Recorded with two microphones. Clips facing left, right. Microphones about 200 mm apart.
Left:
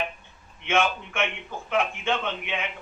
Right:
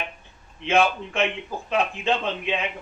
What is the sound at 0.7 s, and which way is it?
Speech, 35° right (ahead or behind).